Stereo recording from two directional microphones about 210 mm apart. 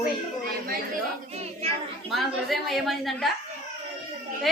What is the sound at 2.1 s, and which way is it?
A woman's voice, centre (ahead or behind).